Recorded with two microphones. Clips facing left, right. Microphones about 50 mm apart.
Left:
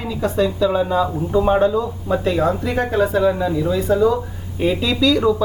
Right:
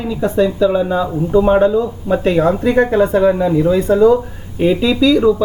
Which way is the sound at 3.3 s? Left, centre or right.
Right.